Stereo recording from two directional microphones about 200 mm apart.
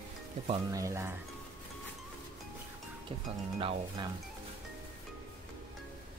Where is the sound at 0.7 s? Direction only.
15° right (ahead or behind).